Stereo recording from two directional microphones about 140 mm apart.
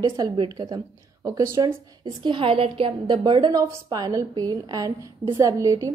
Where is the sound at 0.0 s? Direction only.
30° right (ahead or behind).